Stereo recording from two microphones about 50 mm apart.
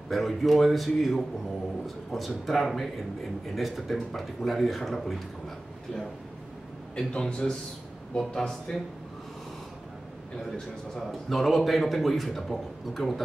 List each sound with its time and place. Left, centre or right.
0.1 s a man's voice: centre
7.0 s a man's voice: centre
11.1 s a man's voice: centre